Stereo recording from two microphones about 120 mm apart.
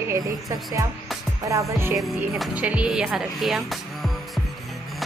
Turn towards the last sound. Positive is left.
turn(degrees=0)  # may be behind; listen again after turning